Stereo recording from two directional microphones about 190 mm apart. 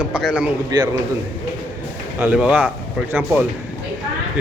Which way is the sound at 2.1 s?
10° right (ahead or behind).